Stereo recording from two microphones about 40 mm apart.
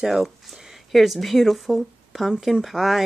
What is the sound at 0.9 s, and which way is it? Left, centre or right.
Speech, centre.